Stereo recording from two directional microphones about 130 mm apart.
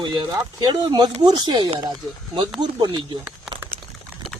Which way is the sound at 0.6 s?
35° right (ahead or behind).